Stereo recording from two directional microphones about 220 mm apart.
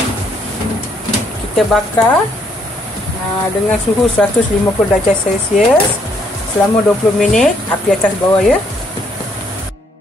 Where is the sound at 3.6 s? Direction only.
5° left (ahead or behind).